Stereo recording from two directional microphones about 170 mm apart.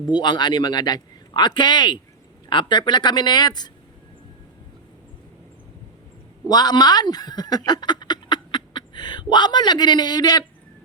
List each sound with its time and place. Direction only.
0.1 s a man's voice: 25° left (ahead or behind)
6.5 s speech: 25° left (ahead or behind)